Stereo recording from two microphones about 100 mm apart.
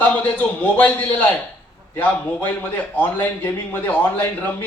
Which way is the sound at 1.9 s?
15° left (ahead or behind).